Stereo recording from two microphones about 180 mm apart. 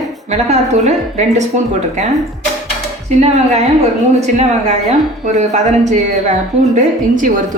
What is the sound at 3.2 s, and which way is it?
Speech, 35° right (ahead or behind).